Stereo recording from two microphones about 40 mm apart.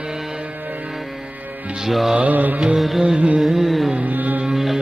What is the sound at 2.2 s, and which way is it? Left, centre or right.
Mantra, right.